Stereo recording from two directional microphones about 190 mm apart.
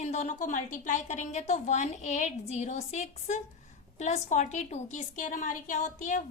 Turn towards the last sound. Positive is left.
turn(degrees=40)  # may be behind; listen again after turning